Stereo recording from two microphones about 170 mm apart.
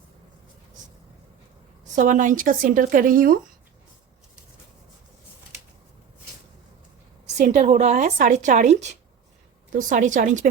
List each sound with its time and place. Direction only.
1.8 s speech: 50° right (ahead or behind)
7.3 s speech: 45° right (ahead or behind)